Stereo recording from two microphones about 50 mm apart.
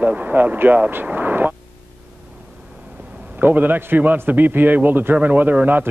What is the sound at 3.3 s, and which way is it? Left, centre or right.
A man's voice, right.